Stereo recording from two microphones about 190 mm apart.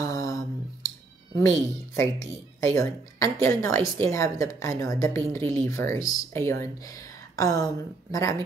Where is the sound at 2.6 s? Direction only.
15° left (ahead or behind).